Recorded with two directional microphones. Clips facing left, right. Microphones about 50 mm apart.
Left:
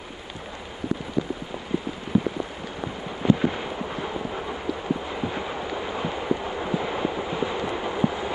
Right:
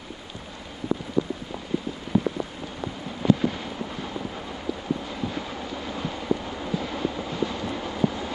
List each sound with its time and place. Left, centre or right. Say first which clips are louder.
3.3 s vehicle: left 1 dB; left
5.0 s train: left 2 dB; centre